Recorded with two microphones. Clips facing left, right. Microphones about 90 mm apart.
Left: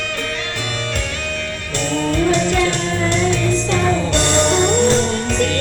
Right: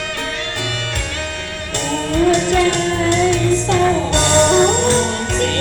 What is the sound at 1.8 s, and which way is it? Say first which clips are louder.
Music: right 1 dB; 50° right (ahead or behind).